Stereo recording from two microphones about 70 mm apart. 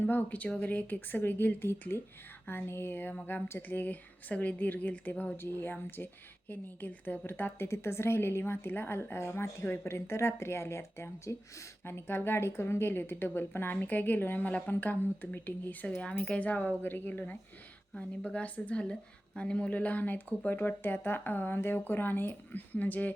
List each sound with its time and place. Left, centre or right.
0.0 s a woman's voice: left